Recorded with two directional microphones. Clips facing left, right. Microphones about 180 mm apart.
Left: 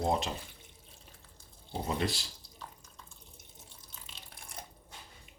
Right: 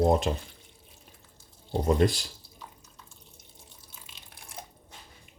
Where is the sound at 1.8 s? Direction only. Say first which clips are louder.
Right 10 dB; 50° right (ahead or behind).